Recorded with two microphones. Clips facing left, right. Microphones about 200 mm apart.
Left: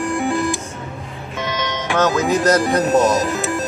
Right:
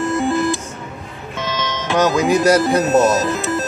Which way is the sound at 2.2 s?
10° right (ahead or behind).